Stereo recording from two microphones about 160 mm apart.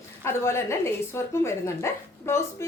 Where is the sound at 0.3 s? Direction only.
15° left (ahead or behind).